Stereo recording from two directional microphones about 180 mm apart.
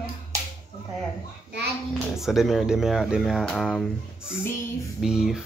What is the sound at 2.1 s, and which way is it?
Speech, centre (ahead or behind).